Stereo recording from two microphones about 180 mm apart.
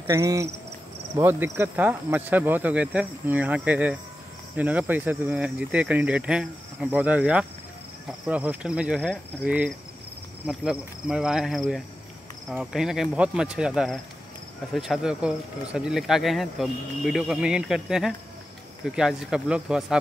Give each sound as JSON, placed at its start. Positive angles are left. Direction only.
{"t": 0.0, "sound": "cricket", "side_deg": -20}
{"t": 1.2, "sound": "speech", "side_deg": -10}